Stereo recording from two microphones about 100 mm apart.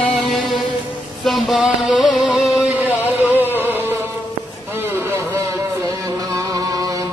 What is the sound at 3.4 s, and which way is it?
Music, 20° right (ahead or behind).